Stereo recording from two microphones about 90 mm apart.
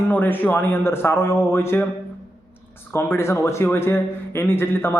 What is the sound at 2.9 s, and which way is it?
A man's voice, 30° left (ahead or behind).